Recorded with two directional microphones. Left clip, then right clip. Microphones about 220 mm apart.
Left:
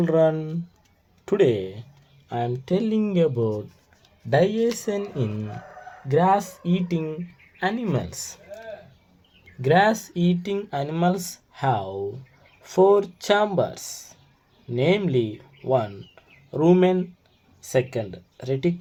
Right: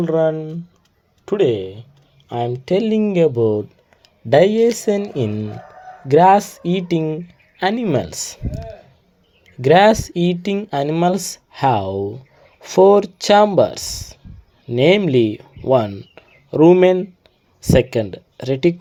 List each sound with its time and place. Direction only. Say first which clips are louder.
0.0 s speech: right 3 dB; centre (ahead or behind)
2.3 s speech: right 6 dB; 20° right (ahead or behind)
9.6 s speech: right 8 dB; 35° right (ahead or behind)